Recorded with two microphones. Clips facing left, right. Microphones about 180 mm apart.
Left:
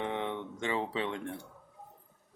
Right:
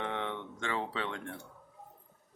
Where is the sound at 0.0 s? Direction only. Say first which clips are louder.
Left 2 dB; 15° left (ahead or behind).